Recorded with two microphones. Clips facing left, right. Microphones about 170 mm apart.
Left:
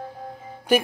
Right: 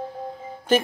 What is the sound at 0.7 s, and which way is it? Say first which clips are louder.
Speech: even; 10° left (ahead or behind).